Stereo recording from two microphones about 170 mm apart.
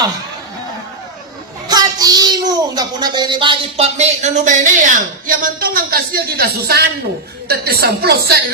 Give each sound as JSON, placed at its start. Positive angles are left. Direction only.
{"t": 1.6, "sound": "a child's voice", "side_deg": -25}